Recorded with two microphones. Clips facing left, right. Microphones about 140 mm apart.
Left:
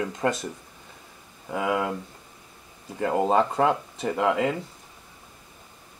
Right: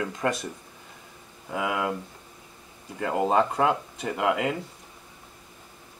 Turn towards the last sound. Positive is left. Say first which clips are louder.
# left 2 dB
turn(degrees=30)  # may be behind; listen again after turning